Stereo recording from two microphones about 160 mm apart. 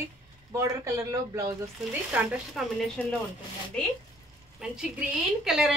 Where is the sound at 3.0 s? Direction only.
10° left (ahead or behind).